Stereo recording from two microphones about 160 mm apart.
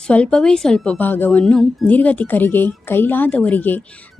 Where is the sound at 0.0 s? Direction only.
5° left (ahead or behind).